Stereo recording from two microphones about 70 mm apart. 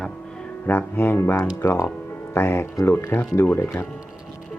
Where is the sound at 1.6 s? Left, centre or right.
Left.